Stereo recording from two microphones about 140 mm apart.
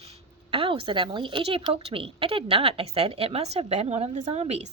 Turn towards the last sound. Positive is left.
turn(degrees=-50)  # may be behind; listen again after turning